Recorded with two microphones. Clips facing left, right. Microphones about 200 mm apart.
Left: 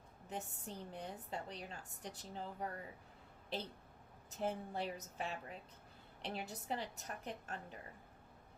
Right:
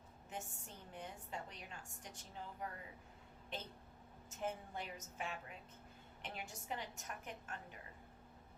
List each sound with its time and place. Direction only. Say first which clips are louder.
0.3 s a woman's voice: left 4 dB; 35° left (ahead or behind)